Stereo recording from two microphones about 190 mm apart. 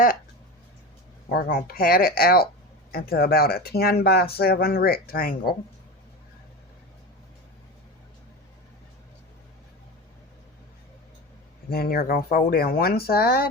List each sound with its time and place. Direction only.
1.3 s speech: 50° left (ahead or behind)
11.7 s speech: 50° left (ahead or behind)